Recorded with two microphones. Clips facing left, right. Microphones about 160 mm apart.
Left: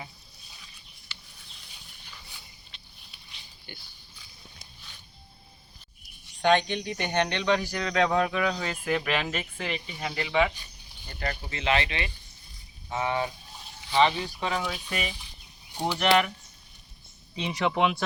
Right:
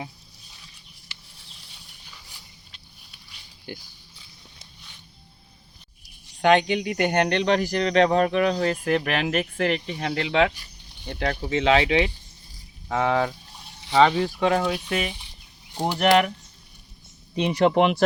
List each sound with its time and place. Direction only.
3.7 s speech: 90° right
6.4 s speech: 75° right (ahead or behind); by 7.6 s 55° right (ahead or behind)
7.8 s speech: 30° right (ahead or behind)
8.2 s speech: 45° right (ahead or behind); by 15.1 s 70° right (ahead or behind)
15.9 s speech: 50° right (ahead or behind)
17.3 s speech: 65° right (ahead or behind)